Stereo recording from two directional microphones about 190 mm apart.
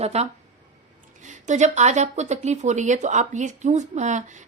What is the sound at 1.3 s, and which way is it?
Speech, 40° right (ahead or behind).